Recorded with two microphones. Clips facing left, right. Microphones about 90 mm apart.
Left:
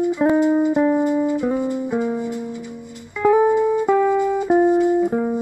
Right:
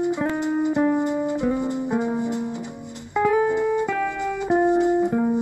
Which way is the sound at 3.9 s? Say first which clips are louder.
Left 8 dB; 20° left (ahead or behind).